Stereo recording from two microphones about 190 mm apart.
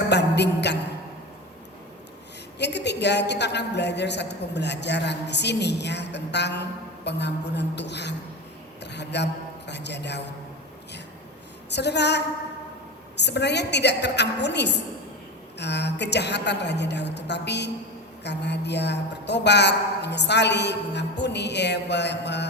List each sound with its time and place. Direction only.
0.1 s a sound: 65° left (ahead or behind)
2.6 s a woman's voice: 65° left (ahead or behind)
11.7 s a woman's voice: 65° left (ahead or behind)